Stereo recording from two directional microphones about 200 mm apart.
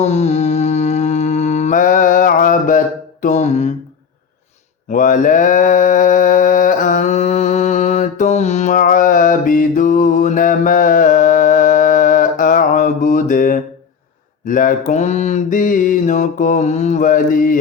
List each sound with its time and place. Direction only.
0.0 s mantra: 35° left (ahead or behind)
4.9 s mantra: 40° left (ahead or behind)